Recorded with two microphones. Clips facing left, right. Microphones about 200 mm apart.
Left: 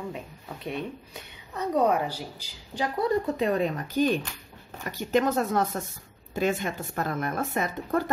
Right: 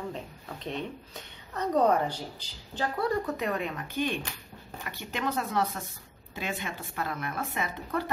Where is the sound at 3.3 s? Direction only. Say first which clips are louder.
Left 6 dB; 30° left (ahead or behind).